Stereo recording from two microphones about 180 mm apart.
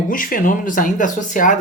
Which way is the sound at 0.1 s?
50° left (ahead or behind).